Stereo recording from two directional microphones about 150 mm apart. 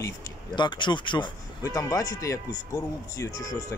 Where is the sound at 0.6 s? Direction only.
30° left (ahead or behind).